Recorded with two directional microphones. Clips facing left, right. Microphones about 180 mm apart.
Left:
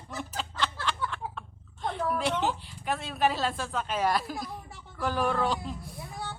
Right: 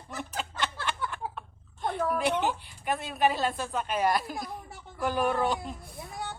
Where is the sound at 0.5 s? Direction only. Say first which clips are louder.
Left 2 dB; 10° right (ahead or behind).